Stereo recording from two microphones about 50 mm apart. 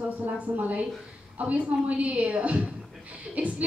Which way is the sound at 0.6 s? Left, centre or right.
Right.